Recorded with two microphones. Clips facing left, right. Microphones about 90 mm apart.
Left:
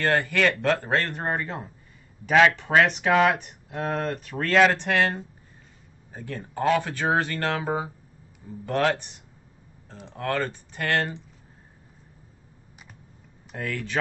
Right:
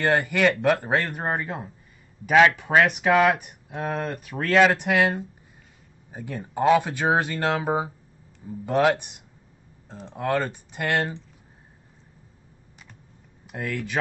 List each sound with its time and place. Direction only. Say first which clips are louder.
0.0 s speech: right 2 dB; 15° right (ahead or behind)
13.5 s speech: right 1 dB; 5° right (ahead or behind)